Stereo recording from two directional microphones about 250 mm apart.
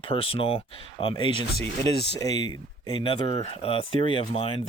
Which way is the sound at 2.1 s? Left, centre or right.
Centre.